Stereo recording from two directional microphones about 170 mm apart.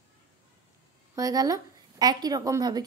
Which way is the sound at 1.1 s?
20° right (ahead or behind).